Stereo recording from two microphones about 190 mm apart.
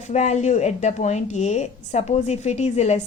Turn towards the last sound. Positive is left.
turn(degrees=35)  # may be behind; listen again after turning